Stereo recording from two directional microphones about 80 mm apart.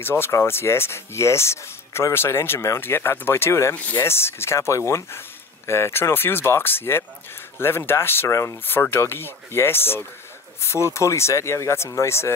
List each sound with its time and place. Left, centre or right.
0.0 s speech: left
3.7 s speech: centre
4.0 s speech: left